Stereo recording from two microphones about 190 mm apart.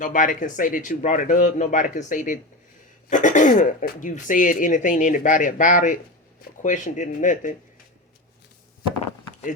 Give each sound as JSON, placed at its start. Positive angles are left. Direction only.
{"t": 0.0, "sound": "speech", "side_deg": 45}